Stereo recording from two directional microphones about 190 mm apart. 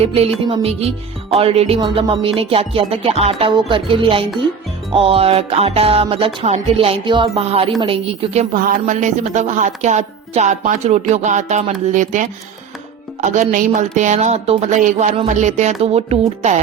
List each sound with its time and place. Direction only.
0.4 s music: 30° right (ahead or behind)
7.8 s speech: 30° right (ahead or behind)